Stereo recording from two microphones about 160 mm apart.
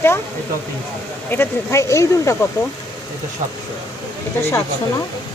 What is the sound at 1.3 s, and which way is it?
Speech, 15° left (ahead or behind).